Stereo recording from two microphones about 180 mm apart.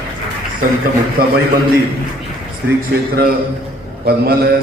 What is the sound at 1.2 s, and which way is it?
Speech, 55° right (ahead or behind).